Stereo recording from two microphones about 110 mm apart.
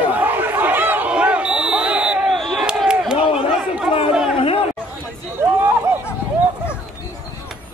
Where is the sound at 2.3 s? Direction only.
Centre (ahead or behind).